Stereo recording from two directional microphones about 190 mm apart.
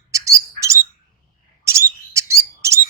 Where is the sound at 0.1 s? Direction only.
15° right (ahead or behind).